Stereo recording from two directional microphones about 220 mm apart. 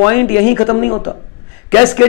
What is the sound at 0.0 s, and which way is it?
A man's voice, 10° left (ahead or behind).